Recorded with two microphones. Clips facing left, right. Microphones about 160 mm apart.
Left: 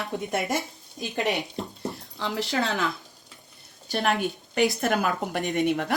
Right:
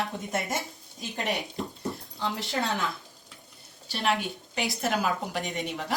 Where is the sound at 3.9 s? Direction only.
50° left (ahead or behind).